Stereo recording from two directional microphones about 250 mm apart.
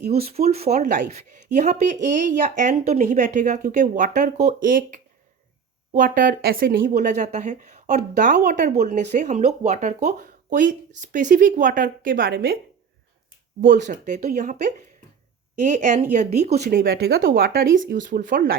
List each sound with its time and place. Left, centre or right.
0.1 s speech: right
13.6 s speech: right